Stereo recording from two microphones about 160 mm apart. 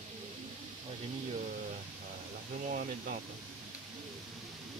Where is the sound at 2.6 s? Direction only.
60° right (ahead or behind).